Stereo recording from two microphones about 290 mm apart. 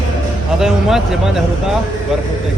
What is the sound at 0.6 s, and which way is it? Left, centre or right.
Speech, centre.